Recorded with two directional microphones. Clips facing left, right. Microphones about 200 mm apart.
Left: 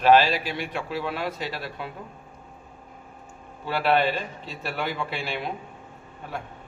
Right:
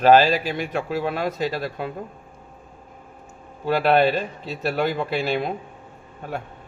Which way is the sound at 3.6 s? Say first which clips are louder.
Right 5 dB; 40° right (ahead or behind).